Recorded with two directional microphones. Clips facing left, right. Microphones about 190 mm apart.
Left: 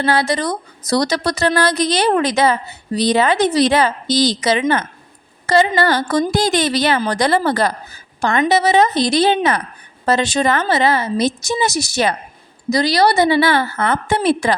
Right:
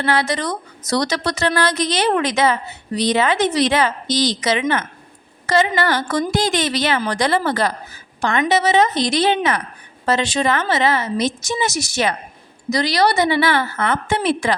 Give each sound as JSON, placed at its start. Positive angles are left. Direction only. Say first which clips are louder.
{"t": 0.0, "sound": "a woman's voice", "louder": "left 2 dB", "side_deg": 35}